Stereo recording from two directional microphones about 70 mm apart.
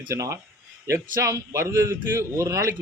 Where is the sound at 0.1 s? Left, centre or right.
Right.